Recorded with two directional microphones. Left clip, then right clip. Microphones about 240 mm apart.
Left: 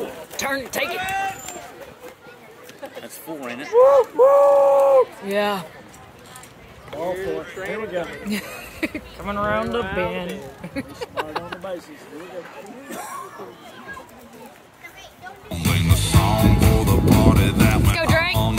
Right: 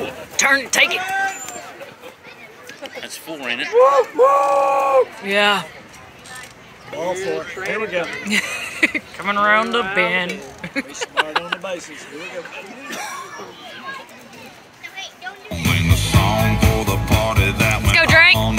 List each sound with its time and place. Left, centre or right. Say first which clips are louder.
0.4 s speech: right 9 dB; centre
3.3 s speech: right 9 dB; left
3.8 s speech: even; right
5.2 s speech: right 6 dB; centre
7.0 s speech: right 3 dB; right
8.3 s speech: right 10 dB; centre
9.8 s speech: right 6 dB; right
10.6 s a sound: right 8 dB; centre
15.5 s music: right 4 dB; right
17.9 s music: right 12 dB; centre